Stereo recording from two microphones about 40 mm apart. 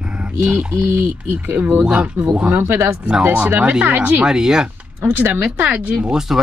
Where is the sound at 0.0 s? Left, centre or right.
Right.